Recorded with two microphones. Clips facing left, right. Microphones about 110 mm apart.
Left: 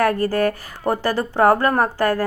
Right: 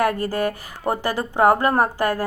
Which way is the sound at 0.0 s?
15° right (ahead or behind).